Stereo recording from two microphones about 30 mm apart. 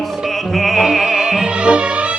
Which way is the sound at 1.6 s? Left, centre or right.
Right.